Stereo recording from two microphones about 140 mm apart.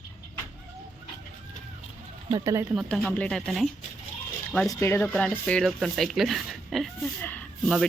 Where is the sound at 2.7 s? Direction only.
Centre (ahead or behind).